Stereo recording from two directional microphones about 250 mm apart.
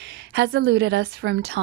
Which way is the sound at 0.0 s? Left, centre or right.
Right.